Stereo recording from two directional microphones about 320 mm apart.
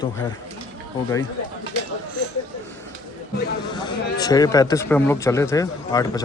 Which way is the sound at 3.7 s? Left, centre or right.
Centre.